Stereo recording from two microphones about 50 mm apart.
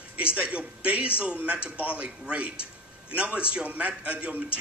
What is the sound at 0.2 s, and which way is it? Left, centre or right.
A man's voice, right.